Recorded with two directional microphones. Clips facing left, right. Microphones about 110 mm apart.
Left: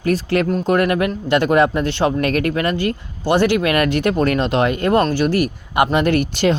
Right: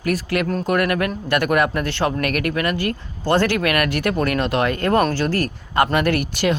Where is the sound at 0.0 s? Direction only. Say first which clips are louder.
Left 4 dB; 30° left (ahead or behind).